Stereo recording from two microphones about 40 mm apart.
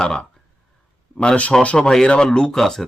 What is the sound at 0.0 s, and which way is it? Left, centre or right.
Speech, left.